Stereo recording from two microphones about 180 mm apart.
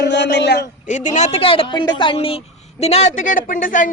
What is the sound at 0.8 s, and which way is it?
Speech, 45° left (ahead or behind).